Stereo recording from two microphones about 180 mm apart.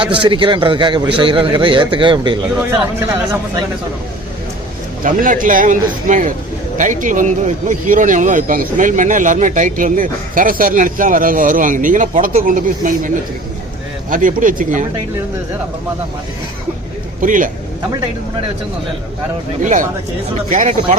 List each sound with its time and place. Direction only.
0.2 s a man's voice: 25° right (ahead or behind)
5.0 s speech: 45° right (ahead or behind)
14.1 s speech: 50° right (ahead or behind)
17.2 s speech: 45° right (ahead or behind)
19.6 s speech: 45° right (ahead or behind)